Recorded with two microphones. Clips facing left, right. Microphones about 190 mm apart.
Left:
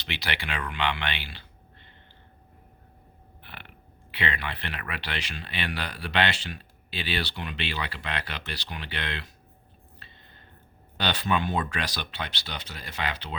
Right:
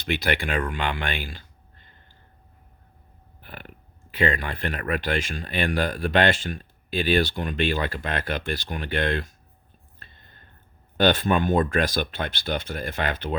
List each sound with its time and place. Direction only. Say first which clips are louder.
0.0 s speech: right 9 dB; 50° right (ahead or behind)
3.4 s speech: right 6 dB; 40° right (ahead or behind)
10.0 s a sound: right 2 dB; 50° right (ahead or behind)
10.9 s speech: right 7 dB; 50° right (ahead or behind)